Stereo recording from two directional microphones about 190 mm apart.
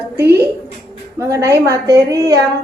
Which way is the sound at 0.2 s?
15° right (ahead or behind).